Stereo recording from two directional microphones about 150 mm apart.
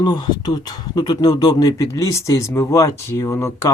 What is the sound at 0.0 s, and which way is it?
Speech, 30° left (ahead or behind).